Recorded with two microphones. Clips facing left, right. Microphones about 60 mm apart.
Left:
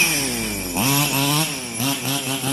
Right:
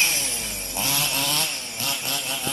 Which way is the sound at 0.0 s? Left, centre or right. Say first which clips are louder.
Left 4 dB; left.